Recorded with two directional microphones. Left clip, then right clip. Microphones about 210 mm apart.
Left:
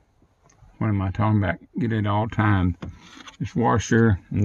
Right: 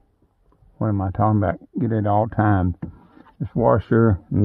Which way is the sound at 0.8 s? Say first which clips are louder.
Right 4 dB; 20° right (ahead or behind).